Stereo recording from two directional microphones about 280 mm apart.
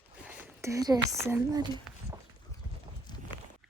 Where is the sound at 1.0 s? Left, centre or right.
Centre.